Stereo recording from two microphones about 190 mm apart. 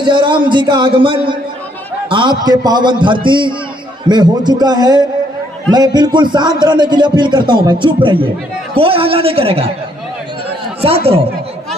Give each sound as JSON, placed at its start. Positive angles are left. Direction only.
{"t": 0.0, "sound": "a man's voice", "side_deg": -25}
{"t": 10.8, "sound": "speech", "side_deg": -30}